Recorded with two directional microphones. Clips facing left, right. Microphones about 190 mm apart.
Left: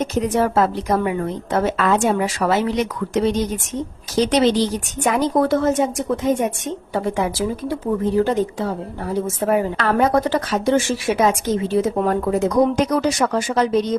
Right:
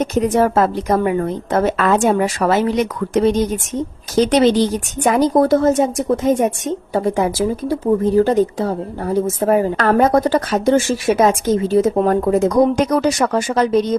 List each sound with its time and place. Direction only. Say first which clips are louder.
0.1 s speech: right 4 dB; 50° right (ahead or behind)
5.0 s speech: right 4 dB; 35° right (ahead or behind)